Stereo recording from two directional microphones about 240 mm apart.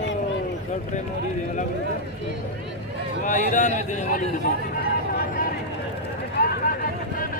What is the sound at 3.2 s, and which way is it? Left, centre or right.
Speech, left.